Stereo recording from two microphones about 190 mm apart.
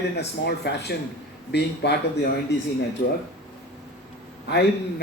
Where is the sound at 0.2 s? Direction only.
65° left (ahead or behind).